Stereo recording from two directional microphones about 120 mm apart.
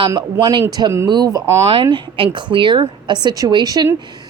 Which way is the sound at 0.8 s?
35° right (ahead or behind).